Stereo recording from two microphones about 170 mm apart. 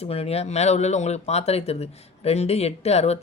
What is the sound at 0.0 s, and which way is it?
Speech, 35° left (ahead or behind).